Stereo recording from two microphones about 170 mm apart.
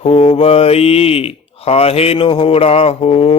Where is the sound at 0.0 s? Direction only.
35° left (ahead or behind).